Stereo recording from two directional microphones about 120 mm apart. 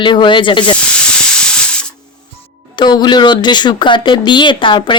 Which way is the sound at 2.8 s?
40° left (ahead or behind).